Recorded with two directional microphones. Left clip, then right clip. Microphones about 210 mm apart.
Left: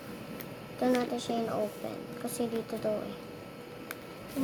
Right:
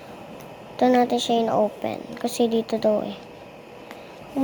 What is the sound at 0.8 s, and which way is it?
A child's voice, 25° right (ahead or behind).